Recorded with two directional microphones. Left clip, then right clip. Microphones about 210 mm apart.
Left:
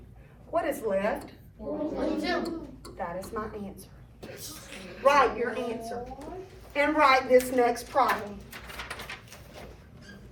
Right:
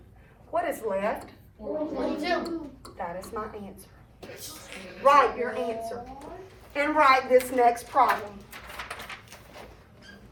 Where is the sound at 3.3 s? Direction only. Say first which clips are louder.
Right 1 dB; 5° right (ahead or behind).